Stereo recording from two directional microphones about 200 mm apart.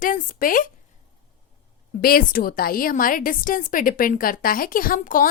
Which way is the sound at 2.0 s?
45° left (ahead or behind).